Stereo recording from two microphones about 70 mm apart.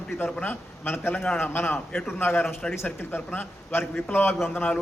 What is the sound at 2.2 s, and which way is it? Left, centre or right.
A man's voice, left.